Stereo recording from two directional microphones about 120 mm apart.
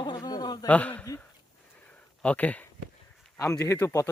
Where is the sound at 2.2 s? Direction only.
10° left (ahead or behind).